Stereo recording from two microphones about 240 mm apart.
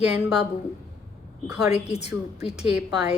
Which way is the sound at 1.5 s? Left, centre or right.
Centre.